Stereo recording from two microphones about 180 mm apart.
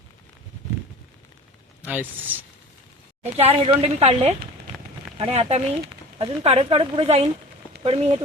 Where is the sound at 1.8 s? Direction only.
10° right (ahead or behind).